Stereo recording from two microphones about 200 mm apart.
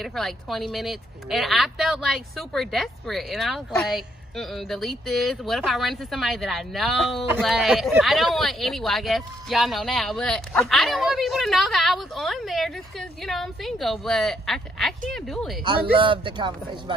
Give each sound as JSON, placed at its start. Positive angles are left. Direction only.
{"t": 0.0, "sound": "speech", "side_deg": 0}
{"t": 16.0, "sound": "speech", "side_deg": -25}